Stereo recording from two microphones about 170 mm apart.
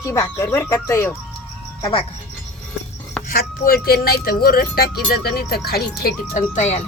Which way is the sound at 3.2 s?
60° left (ahead or behind).